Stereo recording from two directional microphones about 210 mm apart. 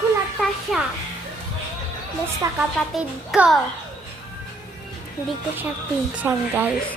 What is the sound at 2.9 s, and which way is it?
Speech, centre (ahead or behind).